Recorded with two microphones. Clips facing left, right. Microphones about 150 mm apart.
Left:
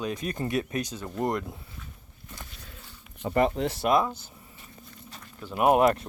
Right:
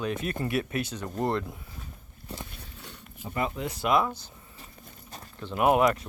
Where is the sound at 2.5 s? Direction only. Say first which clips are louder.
Right 3 dB; 70° right (ahead or behind).